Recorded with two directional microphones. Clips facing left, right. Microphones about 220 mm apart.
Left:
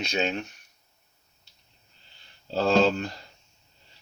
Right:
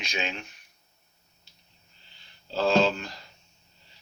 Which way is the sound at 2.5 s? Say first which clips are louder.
Left 2 dB; 40° left (ahead or behind).